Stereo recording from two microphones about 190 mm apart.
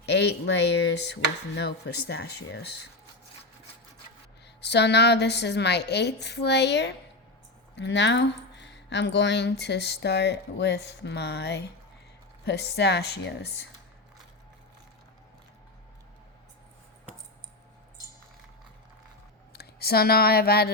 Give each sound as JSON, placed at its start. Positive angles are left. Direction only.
{"t": 0.0, "sound": "speech", "side_deg": 60}
{"t": 4.6, "sound": "speech", "side_deg": 65}
{"t": 19.5, "sound": "speech", "side_deg": 55}